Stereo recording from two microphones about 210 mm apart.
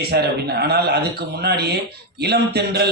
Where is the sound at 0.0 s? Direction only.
50° right (ahead or behind).